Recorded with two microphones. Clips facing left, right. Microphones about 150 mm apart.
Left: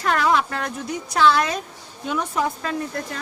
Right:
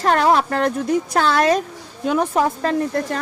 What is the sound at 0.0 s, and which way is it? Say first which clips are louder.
A woman's voice: right 4 dB; 40° right (ahead or behind).